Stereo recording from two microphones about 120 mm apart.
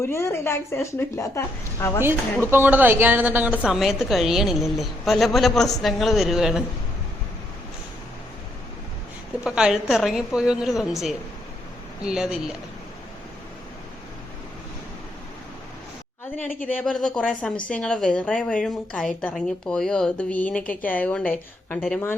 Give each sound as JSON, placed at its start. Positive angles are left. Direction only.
{"t": 0.0, "sound": "a woman's voice", "side_deg": 20}
{"t": 2.0, "sound": "a woman's voice", "side_deg": -20}
{"t": 9.4, "sound": "a man's voice", "side_deg": -5}
{"t": 12.0, "sound": "a man's voice", "side_deg": -5}
{"t": 16.8, "sound": "a woman's voice", "side_deg": 5}